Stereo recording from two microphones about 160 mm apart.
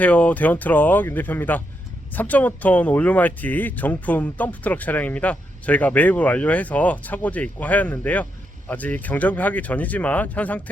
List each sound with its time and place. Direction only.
0.0 s speech: 10° left (ahead or behind)